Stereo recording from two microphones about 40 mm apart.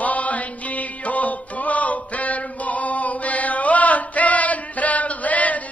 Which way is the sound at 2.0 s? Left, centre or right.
Left.